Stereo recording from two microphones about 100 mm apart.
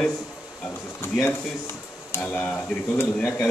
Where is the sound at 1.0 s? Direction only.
25° left (ahead or behind).